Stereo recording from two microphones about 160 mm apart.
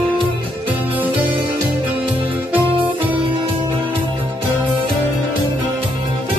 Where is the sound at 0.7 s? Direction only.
10° right (ahead or behind).